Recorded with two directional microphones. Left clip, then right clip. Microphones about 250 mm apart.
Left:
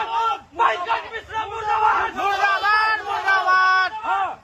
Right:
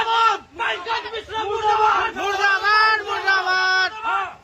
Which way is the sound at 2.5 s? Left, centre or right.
Centre.